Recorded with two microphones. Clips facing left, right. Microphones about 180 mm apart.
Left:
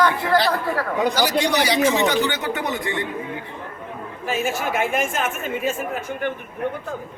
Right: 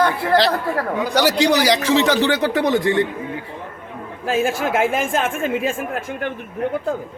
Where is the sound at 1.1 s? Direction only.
75° right (ahead or behind).